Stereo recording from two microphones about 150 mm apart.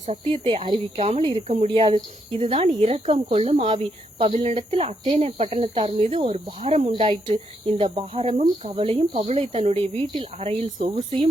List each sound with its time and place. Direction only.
0.0 s speech: 40° right (ahead or behind)